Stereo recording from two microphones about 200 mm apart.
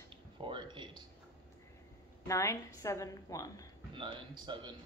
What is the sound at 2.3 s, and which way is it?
A woman's voice, 15° left (ahead or behind).